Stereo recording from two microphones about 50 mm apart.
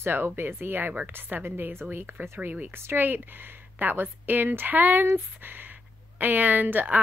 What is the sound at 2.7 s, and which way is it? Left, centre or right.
A woman's voice, right.